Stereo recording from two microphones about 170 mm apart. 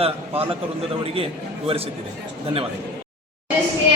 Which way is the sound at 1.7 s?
35° right (ahead or behind).